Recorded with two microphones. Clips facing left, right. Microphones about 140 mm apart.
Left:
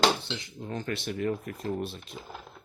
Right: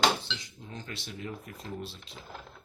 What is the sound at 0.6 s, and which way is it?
A man's voice, 60° left (ahead or behind).